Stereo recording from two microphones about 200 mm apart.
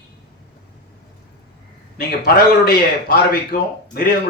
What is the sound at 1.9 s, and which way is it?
A man's voice, 50° left (ahead or behind).